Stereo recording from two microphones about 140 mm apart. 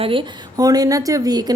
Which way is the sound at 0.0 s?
40° right (ahead or behind).